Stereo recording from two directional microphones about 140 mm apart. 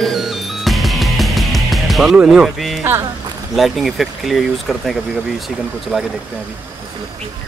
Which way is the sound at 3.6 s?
Centre (ahead or behind).